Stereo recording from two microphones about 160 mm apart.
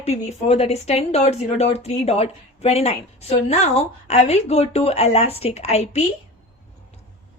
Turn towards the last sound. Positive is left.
turn(degrees=45)  # may be behind; listen again after turning